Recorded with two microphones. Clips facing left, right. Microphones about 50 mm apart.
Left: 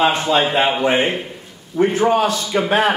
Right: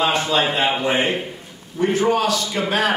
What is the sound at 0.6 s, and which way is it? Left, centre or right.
Speech, centre.